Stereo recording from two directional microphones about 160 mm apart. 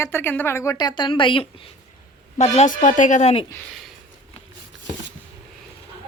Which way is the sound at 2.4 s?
50° left (ahead or behind).